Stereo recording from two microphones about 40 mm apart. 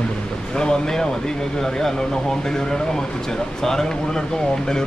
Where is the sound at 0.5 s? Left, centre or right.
Centre.